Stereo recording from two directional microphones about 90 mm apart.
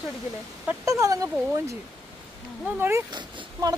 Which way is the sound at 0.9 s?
35° right (ahead or behind).